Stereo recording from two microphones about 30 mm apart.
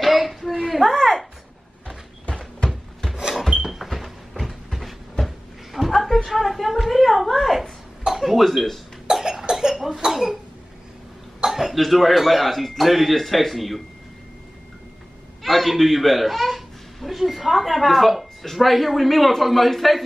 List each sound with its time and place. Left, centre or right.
0.0 s a sound: centre
0.9 s speech: centre
3.3 s a sound: centre
3.9 s a sound: centre
5.2 s cat: centre
6.3 s a woman's voice: centre
9.0 s cough: right
9.8 s a child's voice: centre
11.4 s cough: centre
11.7 s a woman's voice: centre
15.4 s a man's voice: centre